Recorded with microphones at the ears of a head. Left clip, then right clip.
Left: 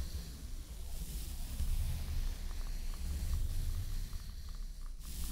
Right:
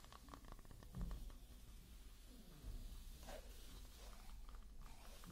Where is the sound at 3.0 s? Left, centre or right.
Left.